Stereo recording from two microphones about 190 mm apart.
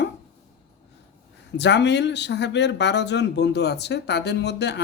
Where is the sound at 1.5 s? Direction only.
65° left (ahead or behind).